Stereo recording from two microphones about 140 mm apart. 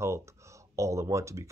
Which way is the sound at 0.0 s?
20° right (ahead or behind).